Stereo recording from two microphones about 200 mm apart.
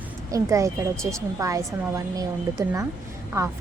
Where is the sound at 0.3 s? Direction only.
15° right (ahead or behind).